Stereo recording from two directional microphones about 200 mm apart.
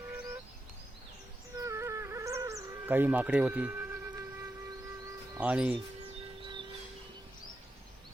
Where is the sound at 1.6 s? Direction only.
15° right (ahead or behind).